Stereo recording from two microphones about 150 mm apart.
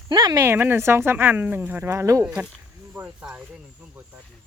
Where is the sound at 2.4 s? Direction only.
10° right (ahead or behind).